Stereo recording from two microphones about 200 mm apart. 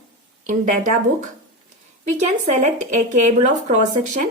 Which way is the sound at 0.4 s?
40° right (ahead or behind).